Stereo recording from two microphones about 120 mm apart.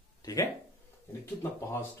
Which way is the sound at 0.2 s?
30° left (ahead or behind).